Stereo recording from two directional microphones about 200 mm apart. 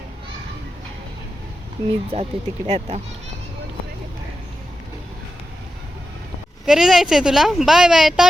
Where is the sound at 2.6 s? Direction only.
30° right (ahead or behind).